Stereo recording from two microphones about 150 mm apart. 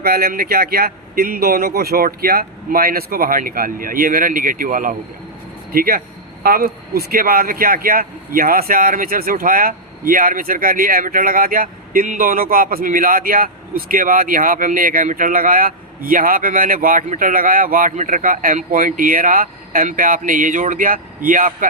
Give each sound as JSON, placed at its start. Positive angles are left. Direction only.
{"t": 0.0, "sound": "speech", "side_deg": -85}
{"t": 5.7, "sound": "speech", "side_deg": -75}